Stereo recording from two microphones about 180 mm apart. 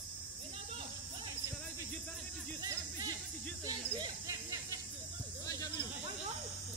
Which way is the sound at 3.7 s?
20° right (ahead or behind).